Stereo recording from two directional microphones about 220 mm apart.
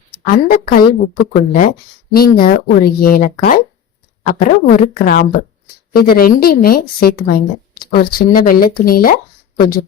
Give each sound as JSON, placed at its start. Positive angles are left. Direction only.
{"t": 0.1, "sound": "a woman's voice", "side_deg": 40}